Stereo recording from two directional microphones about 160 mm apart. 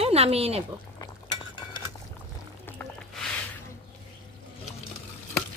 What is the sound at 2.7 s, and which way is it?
Music, 5° left (ahead or behind).